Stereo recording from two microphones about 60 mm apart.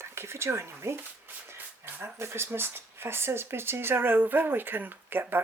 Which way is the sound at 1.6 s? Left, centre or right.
Right.